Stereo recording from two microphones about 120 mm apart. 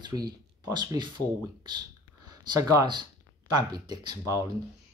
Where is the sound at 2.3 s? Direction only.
30° right (ahead or behind).